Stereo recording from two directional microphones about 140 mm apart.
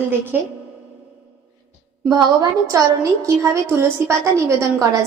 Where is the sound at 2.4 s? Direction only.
20° right (ahead or behind).